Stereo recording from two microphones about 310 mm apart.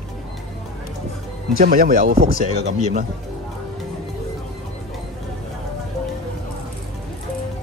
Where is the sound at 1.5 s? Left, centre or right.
Right.